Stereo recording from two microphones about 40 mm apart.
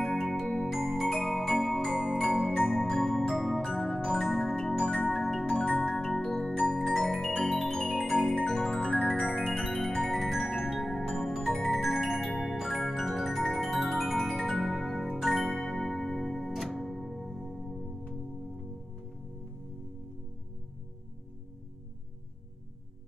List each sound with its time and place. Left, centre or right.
0.1 s music: centre
4.9 s marimba: left
5.2 s music: centre
5.9 s music: centre
8.6 s organ: centre
9.4 s music: centre
10.3 s music: centre
11.8 s music: centre
13.4 s keyboard: centre
15.5 s music: centre